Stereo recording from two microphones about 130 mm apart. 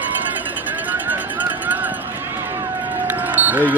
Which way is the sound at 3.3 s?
15° right (ahead or behind).